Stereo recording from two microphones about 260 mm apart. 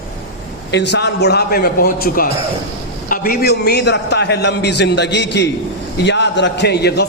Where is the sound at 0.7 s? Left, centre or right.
Left.